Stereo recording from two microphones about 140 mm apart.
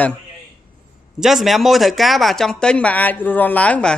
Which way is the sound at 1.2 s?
Centre (ahead or behind).